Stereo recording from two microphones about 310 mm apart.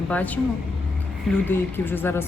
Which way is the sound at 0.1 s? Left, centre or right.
Centre.